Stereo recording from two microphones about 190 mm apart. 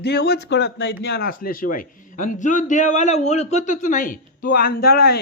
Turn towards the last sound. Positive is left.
turn(degrees=55)  # may be behind; listen again after turning